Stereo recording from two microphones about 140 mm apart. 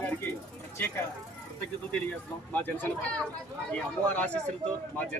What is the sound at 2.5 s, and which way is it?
Speech, 15° left (ahead or behind).